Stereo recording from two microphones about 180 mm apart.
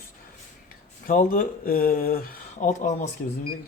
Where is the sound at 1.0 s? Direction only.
50° left (ahead or behind).